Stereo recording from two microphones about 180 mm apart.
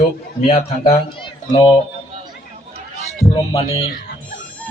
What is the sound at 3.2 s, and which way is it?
Music, 35° left (ahead or behind).